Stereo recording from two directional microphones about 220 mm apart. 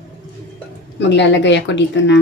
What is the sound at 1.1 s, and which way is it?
Speech, 55° left (ahead or behind).